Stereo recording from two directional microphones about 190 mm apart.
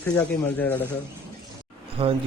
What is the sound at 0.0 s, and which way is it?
Speech, 10° left (ahead or behind).